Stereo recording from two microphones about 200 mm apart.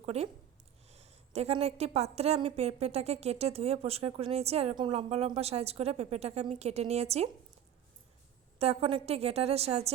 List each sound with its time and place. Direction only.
0.0 s a woman's voice: 30° right (ahead or behind)
8.5 s a woman's voice: 30° right (ahead or behind)